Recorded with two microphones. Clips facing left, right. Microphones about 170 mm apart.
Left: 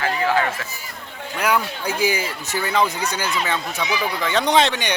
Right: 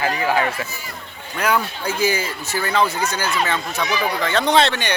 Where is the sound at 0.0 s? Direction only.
15° right (ahead or behind).